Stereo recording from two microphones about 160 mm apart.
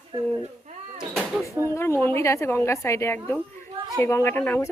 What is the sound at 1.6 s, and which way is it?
A woman's voice, 15° left (ahead or behind).